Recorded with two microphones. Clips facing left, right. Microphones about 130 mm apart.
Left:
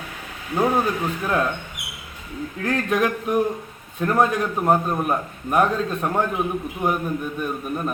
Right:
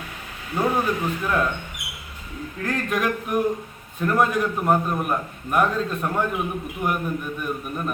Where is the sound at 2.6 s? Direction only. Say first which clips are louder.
Left 3 dB; 20° left (ahead or behind).